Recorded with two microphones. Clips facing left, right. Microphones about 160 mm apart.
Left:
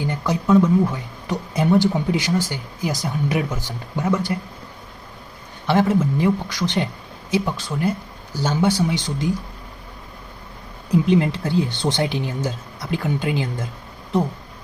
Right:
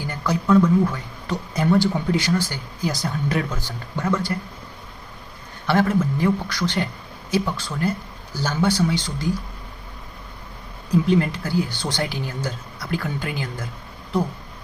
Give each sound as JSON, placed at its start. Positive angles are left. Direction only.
{"t": 0.0, "sound": "speech", "side_deg": 20}
{"t": 5.6, "sound": "speech", "side_deg": 20}
{"t": 10.9, "sound": "speech", "side_deg": 20}